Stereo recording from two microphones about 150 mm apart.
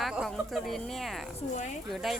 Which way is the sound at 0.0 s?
Centre (ahead or behind).